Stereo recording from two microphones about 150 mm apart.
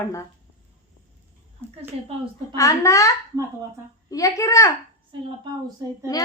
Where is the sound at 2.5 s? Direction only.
20° left (ahead or behind).